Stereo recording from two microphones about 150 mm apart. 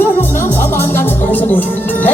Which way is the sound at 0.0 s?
15° left (ahead or behind).